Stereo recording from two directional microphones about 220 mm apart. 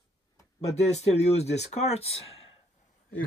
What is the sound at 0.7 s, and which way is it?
Speech, 30° left (ahead or behind).